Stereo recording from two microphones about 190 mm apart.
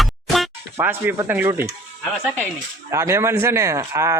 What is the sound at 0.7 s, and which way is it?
Speech, 10° right (ahead or behind).